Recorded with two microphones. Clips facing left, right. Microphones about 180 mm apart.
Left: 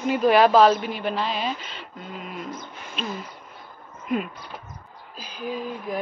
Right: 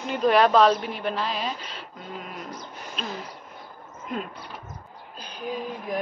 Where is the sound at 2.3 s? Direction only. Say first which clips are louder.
Left 3 dB; 35° right (ahead or behind).